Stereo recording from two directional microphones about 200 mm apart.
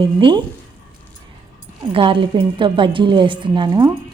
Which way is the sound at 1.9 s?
25° right (ahead or behind).